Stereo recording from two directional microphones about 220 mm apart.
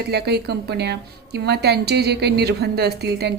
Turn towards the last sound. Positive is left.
turn(degrees=-50)  # may be behind; listen again after turning